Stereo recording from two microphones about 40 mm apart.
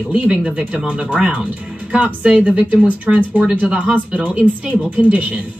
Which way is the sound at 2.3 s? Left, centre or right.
Right.